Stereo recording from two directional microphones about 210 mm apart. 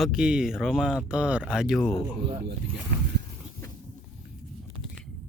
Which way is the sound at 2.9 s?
50° right (ahead or behind).